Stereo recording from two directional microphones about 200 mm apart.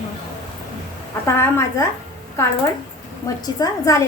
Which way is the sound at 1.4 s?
15° left (ahead or behind).